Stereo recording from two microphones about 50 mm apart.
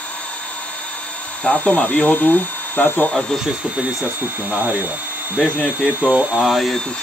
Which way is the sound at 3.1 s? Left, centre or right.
Centre.